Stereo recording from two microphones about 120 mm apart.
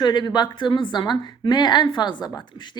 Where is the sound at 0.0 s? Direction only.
40° left (ahead or behind).